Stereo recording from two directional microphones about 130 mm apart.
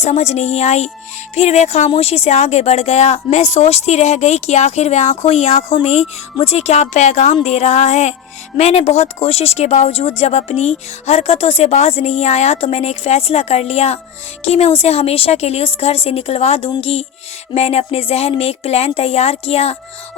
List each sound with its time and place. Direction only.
0.0 s a woman's voice: 55° left (ahead or behind)